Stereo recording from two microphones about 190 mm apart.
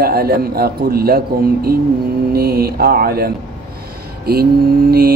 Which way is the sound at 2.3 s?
55° right (ahead or behind).